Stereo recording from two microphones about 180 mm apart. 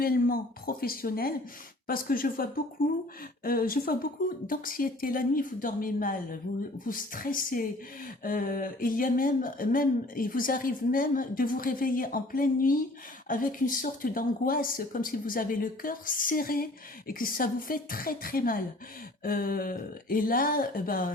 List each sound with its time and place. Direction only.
0.0 s speech: 55° left (ahead or behind)